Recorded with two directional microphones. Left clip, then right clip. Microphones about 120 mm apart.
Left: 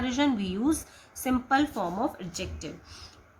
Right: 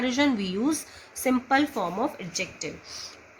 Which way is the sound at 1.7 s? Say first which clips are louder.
Right 2 dB; 30° right (ahead or behind).